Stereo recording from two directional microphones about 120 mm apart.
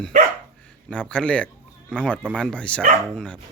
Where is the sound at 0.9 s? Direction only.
10° left (ahead or behind).